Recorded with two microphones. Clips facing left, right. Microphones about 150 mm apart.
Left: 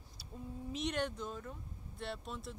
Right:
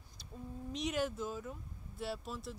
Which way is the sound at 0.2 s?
5° left (ahead or behind).